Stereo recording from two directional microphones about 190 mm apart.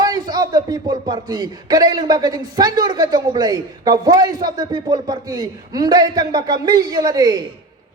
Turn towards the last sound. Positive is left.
turn(degrees=-20)  # may be behind; listen again after turning